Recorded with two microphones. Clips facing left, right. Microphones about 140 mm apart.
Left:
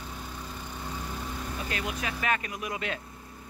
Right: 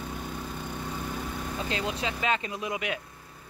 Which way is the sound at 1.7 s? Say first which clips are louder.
Right 3 dB; 25° right (ahead or behind).